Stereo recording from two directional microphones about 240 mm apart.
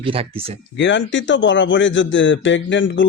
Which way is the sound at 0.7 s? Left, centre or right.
Left.